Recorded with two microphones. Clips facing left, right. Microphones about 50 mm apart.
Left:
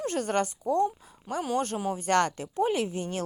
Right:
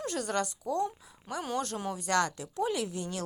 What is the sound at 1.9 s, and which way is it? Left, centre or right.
A woman's voice, left.